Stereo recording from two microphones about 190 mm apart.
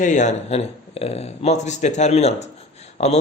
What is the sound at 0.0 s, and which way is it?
Speech, 40° left (ahead or behind).